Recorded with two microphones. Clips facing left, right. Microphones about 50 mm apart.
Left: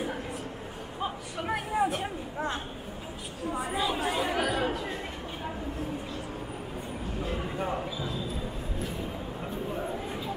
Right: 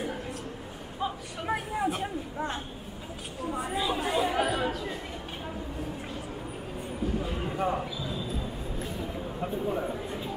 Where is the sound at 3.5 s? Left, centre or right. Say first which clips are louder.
Even; centre.